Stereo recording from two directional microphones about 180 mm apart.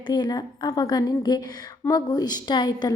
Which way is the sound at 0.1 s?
20° left (ahead or behind).